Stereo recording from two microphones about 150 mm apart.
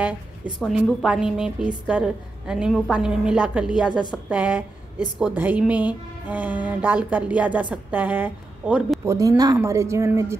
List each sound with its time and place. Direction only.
0.6 s a woman's voice: 5° left (ahead or behind)
9.0 s speech: 20° right (ahead or behind)